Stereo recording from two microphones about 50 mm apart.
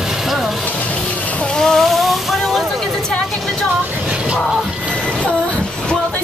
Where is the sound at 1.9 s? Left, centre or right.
Centre.